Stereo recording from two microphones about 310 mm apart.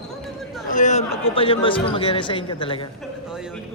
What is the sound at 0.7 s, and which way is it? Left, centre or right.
A woman's voice, left.